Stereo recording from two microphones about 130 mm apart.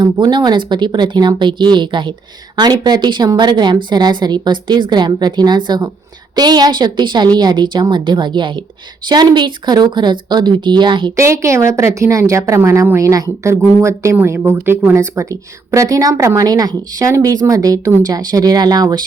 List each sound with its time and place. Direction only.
0.0 s a woman's voice: 35° right (ahead or behind)
11.2 s a woman's voice: 20° right (ahead or behind)